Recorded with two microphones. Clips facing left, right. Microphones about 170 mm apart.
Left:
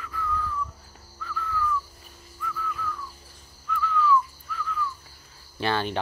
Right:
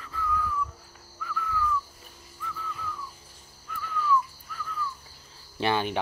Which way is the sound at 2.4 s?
20° right (ahead or behind).